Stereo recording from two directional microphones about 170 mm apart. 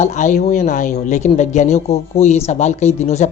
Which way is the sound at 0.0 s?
45° left (ahead or behind).